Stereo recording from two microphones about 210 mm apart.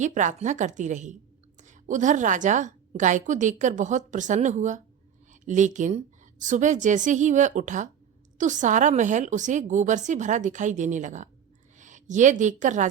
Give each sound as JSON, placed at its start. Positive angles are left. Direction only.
{"t": 0.0, "sound": "a woman's voice", "side_deg": -35}